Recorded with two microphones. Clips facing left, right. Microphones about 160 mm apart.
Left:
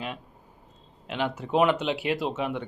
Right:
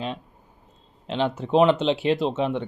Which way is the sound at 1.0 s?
25° right (ahead or behind).